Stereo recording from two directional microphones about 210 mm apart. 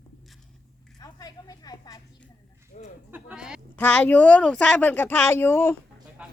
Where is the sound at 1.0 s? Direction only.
15° left (ahead or behind).